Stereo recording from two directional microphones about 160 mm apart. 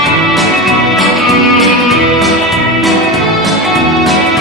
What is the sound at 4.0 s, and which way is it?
Music, centre (ahead or behind).